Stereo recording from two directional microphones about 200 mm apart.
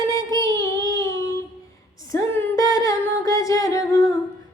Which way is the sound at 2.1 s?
15° left (ahead or behind).